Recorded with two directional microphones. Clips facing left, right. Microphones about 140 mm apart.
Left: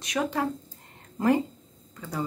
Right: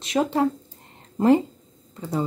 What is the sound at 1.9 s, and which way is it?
Speech, 25° right (ahead or behind).